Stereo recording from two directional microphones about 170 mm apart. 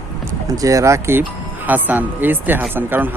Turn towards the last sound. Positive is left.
turn(degrees=-10)  # may be behind; listen again after turning